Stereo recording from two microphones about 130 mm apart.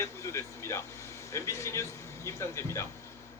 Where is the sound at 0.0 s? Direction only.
20° left (ahead or behind).